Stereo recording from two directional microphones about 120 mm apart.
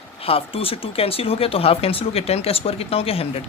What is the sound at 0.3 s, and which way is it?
Speech, 50° left (ahead or behind).